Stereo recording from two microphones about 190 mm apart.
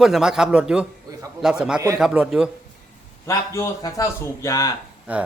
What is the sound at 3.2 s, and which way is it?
A man's voice, 15° left (ahead or behind).